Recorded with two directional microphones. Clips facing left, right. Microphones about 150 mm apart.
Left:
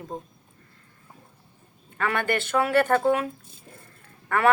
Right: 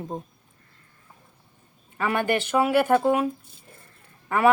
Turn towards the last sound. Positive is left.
turn(degrees=-15)  # may be behind; listen again after turning